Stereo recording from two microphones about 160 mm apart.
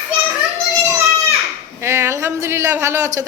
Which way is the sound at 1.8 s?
15° right (ahead or behind).